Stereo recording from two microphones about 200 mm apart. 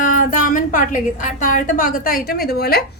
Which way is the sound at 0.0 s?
40° left (ahead or behind).